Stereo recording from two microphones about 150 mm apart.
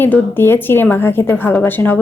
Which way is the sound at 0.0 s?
10° left (ahead or behind).